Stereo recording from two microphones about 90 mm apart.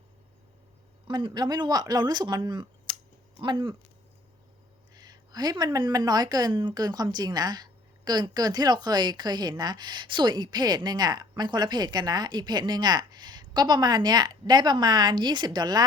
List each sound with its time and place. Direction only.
1.0 s a woman's voice: 60° right (ahead or behind)
4.9 s a woman's voice: 50° right (ahead or behind)